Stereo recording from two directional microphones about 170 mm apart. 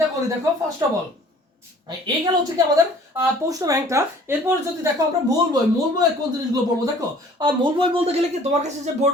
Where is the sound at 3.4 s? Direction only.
20° right (ahead or behind).